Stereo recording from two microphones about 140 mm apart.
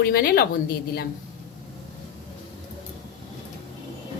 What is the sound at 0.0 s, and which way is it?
Speech, 90° left.